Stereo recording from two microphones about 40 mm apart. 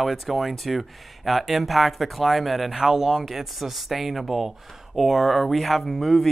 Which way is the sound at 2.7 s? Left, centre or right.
Centre.